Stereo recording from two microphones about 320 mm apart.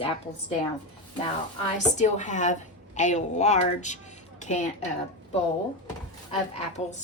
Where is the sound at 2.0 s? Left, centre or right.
Left.